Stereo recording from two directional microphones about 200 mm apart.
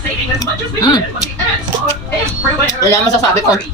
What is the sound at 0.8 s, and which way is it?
Speech, 20° left (ahead or behind).